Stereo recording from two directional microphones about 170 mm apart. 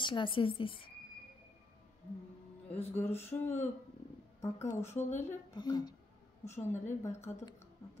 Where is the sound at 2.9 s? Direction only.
10° left (ahead or behind).